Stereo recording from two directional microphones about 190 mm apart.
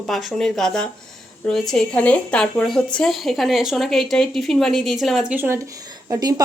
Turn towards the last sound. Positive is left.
turn(degrees=-15)  # may be behind; listen again after turning